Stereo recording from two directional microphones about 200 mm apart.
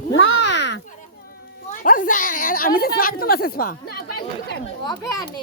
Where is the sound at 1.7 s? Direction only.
40° left (ahead or behind).